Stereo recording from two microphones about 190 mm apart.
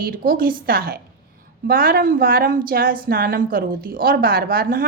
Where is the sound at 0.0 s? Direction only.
50° right (ahead or behind).